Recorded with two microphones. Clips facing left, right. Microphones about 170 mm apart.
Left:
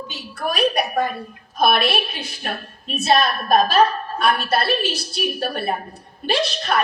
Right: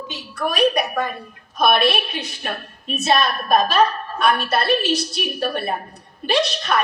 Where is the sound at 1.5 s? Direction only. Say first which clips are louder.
Right 1 dB; 30° left (ahead or behind).